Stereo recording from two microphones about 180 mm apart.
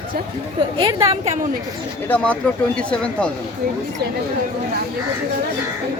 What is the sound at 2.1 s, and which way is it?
Speech, 10° left (ahead or behind).